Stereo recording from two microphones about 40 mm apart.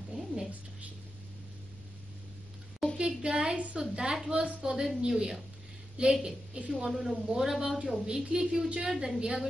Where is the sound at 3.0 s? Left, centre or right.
Right.